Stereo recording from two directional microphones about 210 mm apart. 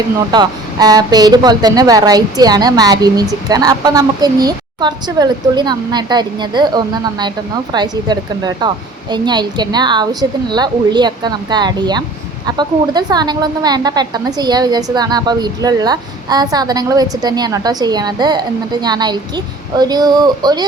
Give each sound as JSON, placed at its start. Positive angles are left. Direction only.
{"t": 0.3, "sound": "speech", "side_deg": -20}